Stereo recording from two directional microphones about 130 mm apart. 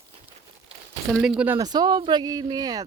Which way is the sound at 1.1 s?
Centre (ahead or behind).